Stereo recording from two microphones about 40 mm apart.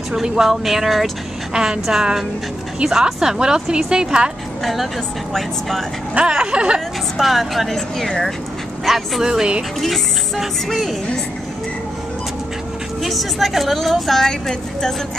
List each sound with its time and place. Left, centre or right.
0.1 s a woman's voice: centre
1.5 s a woman's voice: centre
5.3 s a woman's voice: centre
6.1 s speech: right
7.2 s a woman's voice: centre
8.8 s a woman's voice: centre
9.8 s a woman's voice: centre
13.0 s a woman's voice: centre